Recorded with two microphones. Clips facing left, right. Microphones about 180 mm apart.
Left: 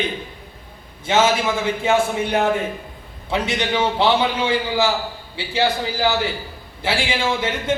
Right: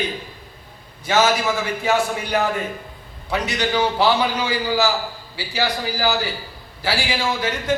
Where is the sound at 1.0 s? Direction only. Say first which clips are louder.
Left 1 dB; 25° left (ahead or behind).